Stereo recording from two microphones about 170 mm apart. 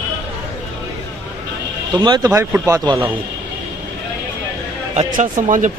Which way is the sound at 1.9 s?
25° right (ahead or behind).